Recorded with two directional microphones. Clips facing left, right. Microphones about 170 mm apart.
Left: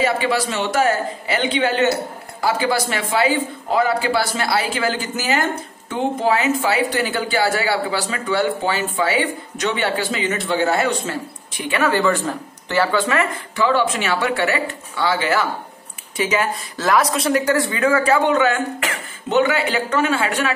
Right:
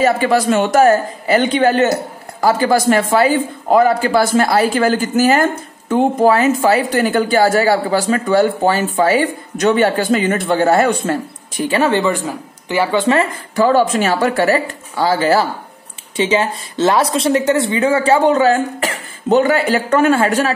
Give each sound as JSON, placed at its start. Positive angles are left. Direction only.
{"t": 0.0, "sound": "a woman's voice", "side_deg": -45}
{"t": 11.7, "sound": "speech", "side_deg": -25}
{"t": 13.6, "sound": "speech", "side_deg": -40}
{"t": 16.2, "sound": "speech", "side_deg": -25}